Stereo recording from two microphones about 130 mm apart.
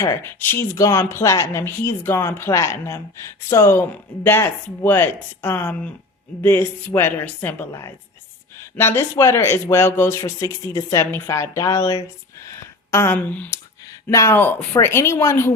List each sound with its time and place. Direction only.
0.0 s a woman's voice: 20° left (ahead or behind)
14.1 s speech: 25° left (ahead or behind)